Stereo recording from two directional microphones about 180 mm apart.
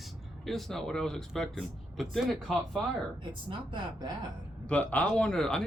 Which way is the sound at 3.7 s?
25° right (ahead or behind).